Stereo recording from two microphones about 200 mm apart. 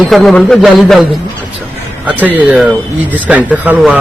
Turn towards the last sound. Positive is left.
turn(degrees=-10)  # may be behind; listen again after turning